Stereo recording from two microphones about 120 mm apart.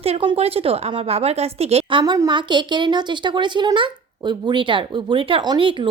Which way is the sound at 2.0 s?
35° right (ahead or behind).